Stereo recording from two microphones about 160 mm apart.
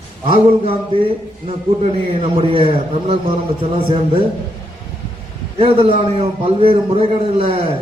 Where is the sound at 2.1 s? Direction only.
35° right (ahead or behind).